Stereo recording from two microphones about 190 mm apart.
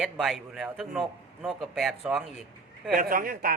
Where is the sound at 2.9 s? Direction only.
50° right (ahead or behind).